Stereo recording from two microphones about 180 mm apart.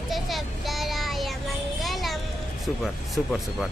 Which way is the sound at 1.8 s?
Centre (ahead or behind).